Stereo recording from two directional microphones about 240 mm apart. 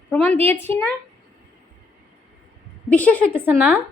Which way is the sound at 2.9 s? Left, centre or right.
Centre.